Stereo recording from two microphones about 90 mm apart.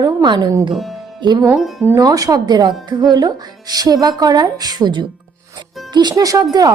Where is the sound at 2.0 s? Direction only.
40° right (ahead or behind).